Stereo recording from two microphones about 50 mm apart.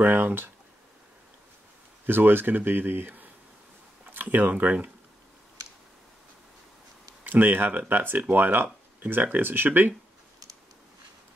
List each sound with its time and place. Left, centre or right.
0.0 s speech: right
2.0 s speech: right
7.2 s speech: right